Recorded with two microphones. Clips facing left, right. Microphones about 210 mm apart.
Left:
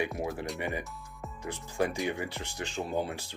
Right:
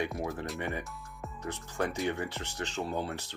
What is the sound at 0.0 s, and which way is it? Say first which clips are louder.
Speech: left 1 dB; 15° left (ahead or behind).